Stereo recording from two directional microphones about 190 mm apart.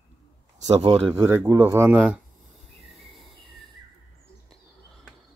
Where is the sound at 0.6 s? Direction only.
30° right (ahead or behind).